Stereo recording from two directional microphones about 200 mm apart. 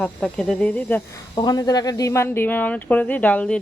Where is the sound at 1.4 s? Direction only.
20° left (ahead or behind).